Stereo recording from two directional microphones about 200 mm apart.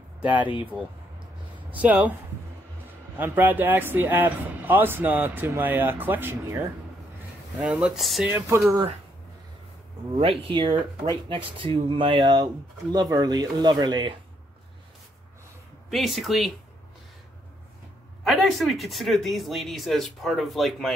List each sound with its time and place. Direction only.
1.7 s a man's voice: 5° right (ahead or behind)
3.2 s a man's voice: 10° right (ahead or behind)
7.6 s speech: 5° right (ahead or behind)
10.1 s speech: 25° right (ahead or behind)
15.9 s speech: centre (ahead or behind)
18.2 s speech: centre (ahead or behind)